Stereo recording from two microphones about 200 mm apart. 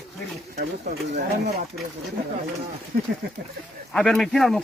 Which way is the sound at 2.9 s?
50° right (ahead or behind).